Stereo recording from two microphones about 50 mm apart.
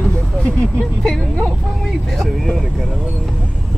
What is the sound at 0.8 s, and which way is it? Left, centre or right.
Speech, centre.